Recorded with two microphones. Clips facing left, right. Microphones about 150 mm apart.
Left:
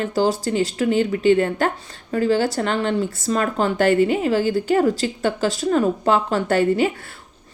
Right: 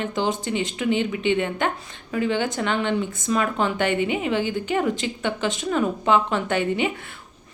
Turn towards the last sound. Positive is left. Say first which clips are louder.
# left 5 dB
turn(degrees=40)  # may be behind; listen again after turning